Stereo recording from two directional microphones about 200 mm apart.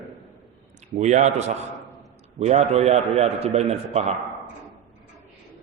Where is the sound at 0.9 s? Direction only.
35° right (ahead or behind).